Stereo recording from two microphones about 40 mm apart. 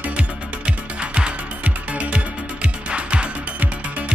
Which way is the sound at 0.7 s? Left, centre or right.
Right.